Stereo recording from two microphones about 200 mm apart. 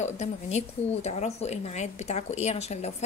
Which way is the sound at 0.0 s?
35° left (ahead or behind).